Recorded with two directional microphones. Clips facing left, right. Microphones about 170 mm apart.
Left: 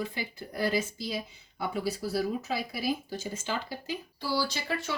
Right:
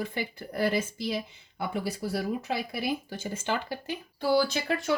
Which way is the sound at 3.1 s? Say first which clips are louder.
Right 3 dB; 55° right (ahead or behind).